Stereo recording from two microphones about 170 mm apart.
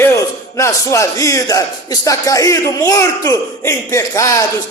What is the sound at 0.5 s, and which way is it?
A man's voice, 15° left (ahead or behind).